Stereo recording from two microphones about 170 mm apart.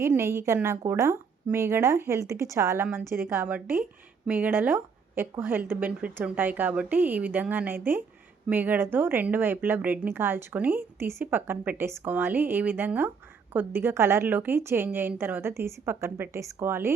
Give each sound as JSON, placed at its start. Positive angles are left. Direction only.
{"t": 0.0, "sound": "speech", "side_deg": -15}